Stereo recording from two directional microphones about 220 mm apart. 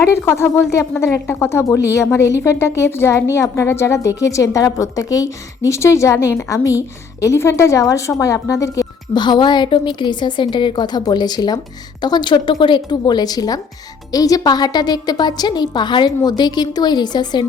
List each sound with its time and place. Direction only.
0.0 s speech: 10° left (ahead or behind)